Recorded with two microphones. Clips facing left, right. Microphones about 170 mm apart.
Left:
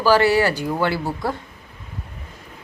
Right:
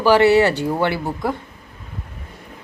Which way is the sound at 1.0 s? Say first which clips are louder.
Right 1 dB; 5° left (ahead or behind).